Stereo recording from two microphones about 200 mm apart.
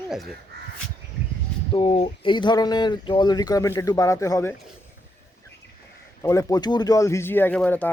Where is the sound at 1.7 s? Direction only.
30° left (ahead or behind); by 4.5 s 15° left (ahead or behind).